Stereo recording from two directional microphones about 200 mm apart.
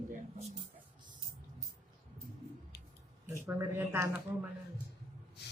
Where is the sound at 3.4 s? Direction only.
15° right (ahead or behind).